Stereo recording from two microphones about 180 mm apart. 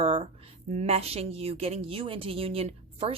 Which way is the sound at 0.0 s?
30° right (ahead or behind).